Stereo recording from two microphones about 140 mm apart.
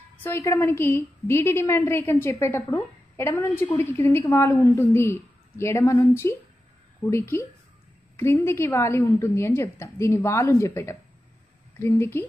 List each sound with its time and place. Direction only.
0.2 s a woman's voice: 20° left (ahead or behind)